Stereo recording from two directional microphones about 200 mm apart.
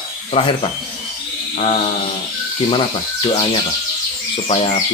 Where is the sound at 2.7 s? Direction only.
25° left (ahead or behind).